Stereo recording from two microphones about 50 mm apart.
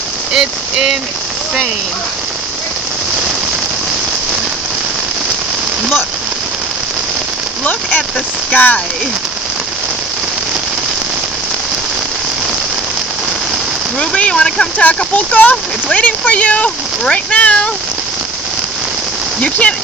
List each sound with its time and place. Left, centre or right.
0.3 s rain on surface: centre
7.6 s speech: left
14.2 s speech: left
14.8 s speech: left
19.4 s speech: left